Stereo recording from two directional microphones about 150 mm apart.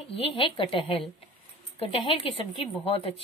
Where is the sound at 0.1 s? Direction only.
40° left (ahead or behind).